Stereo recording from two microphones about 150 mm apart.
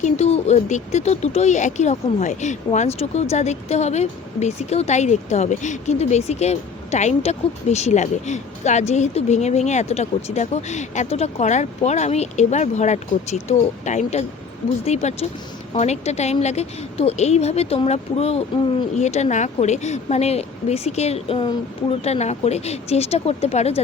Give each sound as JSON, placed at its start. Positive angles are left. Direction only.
{"t": 0.0, "sound": "speech", "side_deg": 45}